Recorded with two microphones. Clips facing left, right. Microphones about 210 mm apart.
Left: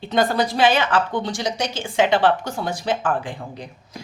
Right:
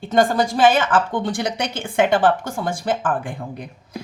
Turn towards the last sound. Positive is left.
turn(degrees=-55)  # may be behind; listen again after turning